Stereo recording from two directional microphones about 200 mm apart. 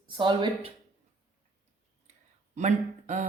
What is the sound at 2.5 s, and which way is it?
Speech, 35° right (ahead or behind).